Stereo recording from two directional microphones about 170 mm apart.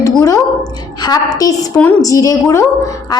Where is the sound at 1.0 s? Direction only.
25° left (ahead or behind).